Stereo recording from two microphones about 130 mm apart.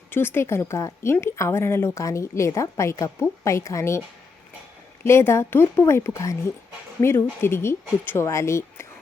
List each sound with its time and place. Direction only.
0.1 s a woman's voice: 15° left (ahead or behind)
5.0 s a woman's voice: 20° left (ahead or behind)